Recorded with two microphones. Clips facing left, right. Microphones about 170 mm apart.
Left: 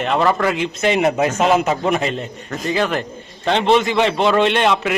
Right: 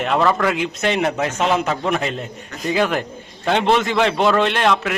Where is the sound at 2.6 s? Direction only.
10° right (ahead or behind).